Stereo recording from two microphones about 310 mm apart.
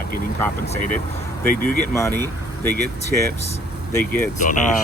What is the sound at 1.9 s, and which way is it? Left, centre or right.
Speech, centre.